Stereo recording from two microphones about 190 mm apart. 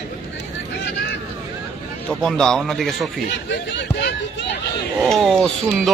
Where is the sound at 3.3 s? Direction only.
65° left (ahead or behind).